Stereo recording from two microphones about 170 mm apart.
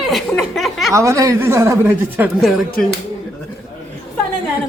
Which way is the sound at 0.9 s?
20° right (ahead or behind).